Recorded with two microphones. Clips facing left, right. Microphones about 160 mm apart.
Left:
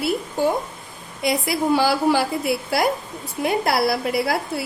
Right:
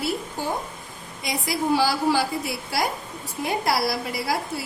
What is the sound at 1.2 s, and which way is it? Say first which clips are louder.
A woman's voice: left 5 dB; 60° left (ahead or behind).